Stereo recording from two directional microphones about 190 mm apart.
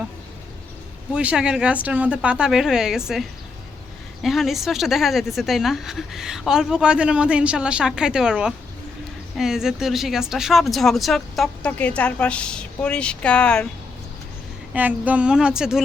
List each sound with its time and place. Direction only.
1.1 s speech: 5° right (ahead or behind)
14.7 s speech: 10° right (ahead or behind)